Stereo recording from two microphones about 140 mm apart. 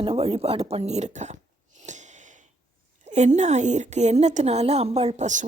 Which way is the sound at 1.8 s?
60° right (ahead or behind).